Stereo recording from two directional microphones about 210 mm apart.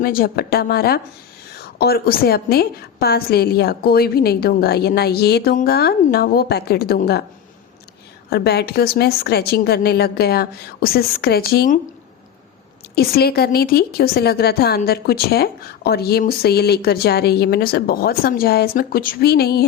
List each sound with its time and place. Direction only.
0.0 s a woman's voice: 45° left (ahead or behind)
8.3 s a woman's voice: 50° left (ahead or behind)
13.0 s a woman's voice: 45° left (ahead or behind)